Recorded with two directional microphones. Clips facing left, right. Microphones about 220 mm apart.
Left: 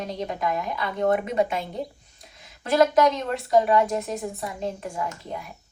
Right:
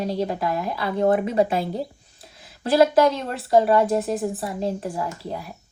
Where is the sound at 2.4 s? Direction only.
30° right (ahead or behind).